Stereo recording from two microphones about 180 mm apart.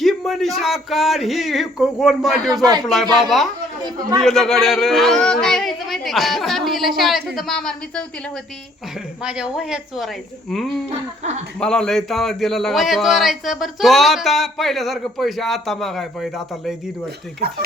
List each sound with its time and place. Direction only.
0.0 s a man's voice: centre (ahead or behind)
3.8 s a man's voice: 20° right (ahead or behind)
4.2 s a man's voice: 5° left (ahead or behind)
9.2 s a man's voice: 5° right (ahead or behind)
11.2 s speech: 40° right (ahead or behind)
11.6 s a man's voice: 5° left (ahead or behind)